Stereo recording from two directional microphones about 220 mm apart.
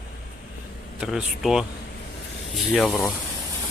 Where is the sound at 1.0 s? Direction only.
Centre (ahead or behind).